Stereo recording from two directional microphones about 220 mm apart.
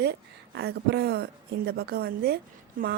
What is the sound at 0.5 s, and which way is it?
Speech, 50° right (ahead or behind).